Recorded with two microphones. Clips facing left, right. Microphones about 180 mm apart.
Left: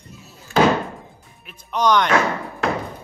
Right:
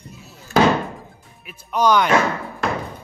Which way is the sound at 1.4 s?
5° right (ahead or behind).